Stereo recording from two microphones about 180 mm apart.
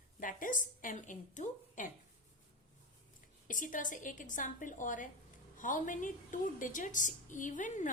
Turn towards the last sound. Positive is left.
turn(degrees=45)  # may be behind; listen again after turning